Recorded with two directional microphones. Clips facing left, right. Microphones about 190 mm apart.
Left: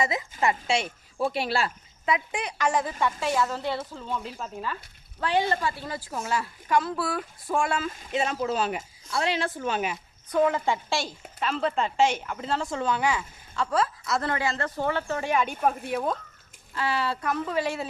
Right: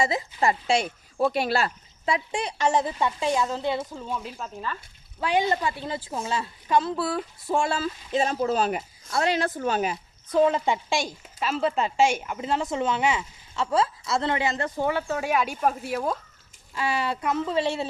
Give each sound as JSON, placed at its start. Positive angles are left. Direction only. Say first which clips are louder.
{"t": 0.0, "sound": "speech", "louder": "right 2 dB", "side_deg": -30}
{"t": 4.4, "sound": "speech", "louder": "even", "side_deg": 5}
{"t": 5.2, "sound": "speech", "louder": "right 1 dB", "side_deg": -15}
{"t": 10.3, "sound": "speech", "louder": "right 2 dB", "side_deg": -20}
{"t": 16.7, "sound": "speech", "louder": "right 1 dB", "side_deg": -15}